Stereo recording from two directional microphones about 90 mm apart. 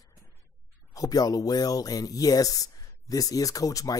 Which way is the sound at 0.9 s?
45° left (ahead or behind).